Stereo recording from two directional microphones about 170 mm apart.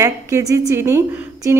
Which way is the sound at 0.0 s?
20° right (ahead or behind).